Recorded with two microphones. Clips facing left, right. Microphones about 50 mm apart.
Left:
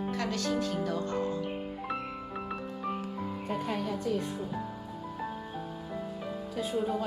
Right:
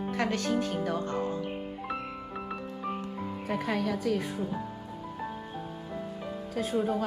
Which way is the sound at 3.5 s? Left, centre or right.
Right.